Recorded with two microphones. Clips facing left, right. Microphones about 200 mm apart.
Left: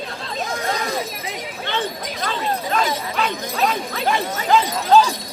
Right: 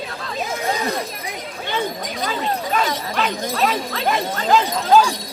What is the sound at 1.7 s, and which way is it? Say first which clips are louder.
Dog: right 2 dB; 5° right (ahead or behind).